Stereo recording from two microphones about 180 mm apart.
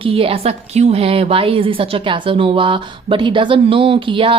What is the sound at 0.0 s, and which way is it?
A woman's voice, 30° right (ahead or behind).